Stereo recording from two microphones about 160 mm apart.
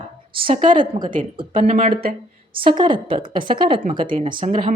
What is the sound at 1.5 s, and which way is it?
Speech, 50° right (ahead or behind).